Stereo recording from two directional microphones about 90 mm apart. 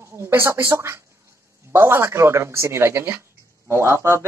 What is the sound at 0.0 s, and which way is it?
Speech, 30° right (ahead or behind).